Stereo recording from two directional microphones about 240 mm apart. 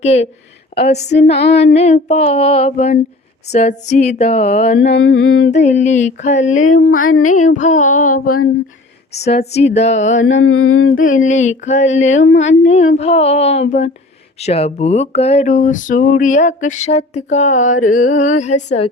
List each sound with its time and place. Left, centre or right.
0.0 s speech: left
4.8 s a sound: left
5.5 s speech: left
6.5 s a sound: left
7.5 s music: left
9.5 s speech: left
10.2 s a sound: left
10.9 s speech: left
12.2 s humming: left
12.5 s speech: left